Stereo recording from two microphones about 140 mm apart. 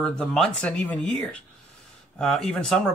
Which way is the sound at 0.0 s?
5° left (ahead or behind).